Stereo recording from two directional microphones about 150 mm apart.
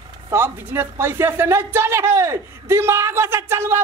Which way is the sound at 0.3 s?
15° right (ahead or behind).